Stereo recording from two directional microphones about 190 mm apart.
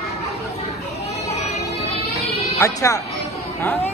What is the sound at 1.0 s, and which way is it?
Children playing, 35° left (ahead or behind).